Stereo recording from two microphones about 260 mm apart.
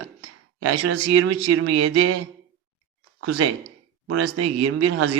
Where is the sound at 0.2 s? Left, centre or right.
Right.